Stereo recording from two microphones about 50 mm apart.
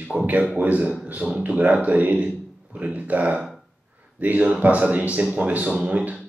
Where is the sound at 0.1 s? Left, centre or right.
Centre.